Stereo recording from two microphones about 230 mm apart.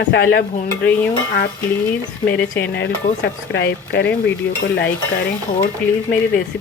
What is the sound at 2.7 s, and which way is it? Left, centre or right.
Speech, left.